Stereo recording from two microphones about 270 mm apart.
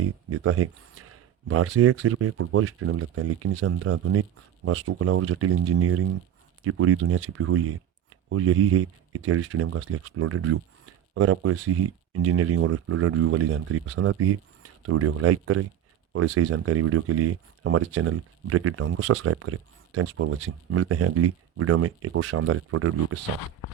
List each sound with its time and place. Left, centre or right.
0.3 s speech: right